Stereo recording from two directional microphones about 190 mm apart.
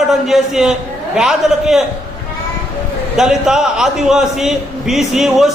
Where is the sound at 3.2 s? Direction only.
5° right (ahead or behind).